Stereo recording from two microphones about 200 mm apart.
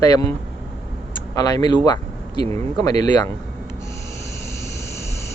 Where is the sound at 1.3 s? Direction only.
15° left (ahead or behind).